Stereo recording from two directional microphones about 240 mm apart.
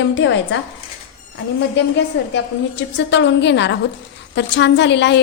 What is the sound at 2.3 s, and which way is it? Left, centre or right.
A woman's voice, left.